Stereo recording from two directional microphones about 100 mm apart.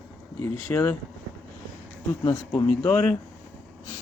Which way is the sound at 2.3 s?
25° left (ahead or behind).